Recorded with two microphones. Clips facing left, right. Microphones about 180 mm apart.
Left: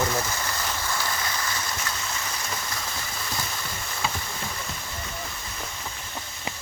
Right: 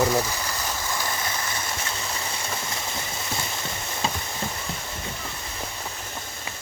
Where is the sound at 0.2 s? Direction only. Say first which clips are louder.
Right 2 dB; 10° right (ahead or behind).